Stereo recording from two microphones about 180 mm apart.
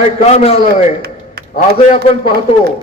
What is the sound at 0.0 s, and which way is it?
Speech, 35° left (ahead or behind).